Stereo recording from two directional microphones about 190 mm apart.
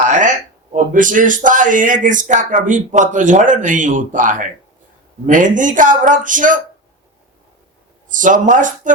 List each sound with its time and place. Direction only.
0.0 s speech: 40° right (ahead or behind)
8.1 s speech: 45° right (ahead or behind)